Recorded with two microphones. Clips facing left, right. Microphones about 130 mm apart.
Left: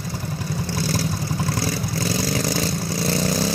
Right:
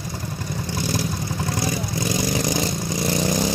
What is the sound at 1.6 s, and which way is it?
Vehicle, 15° right (ahead or behind).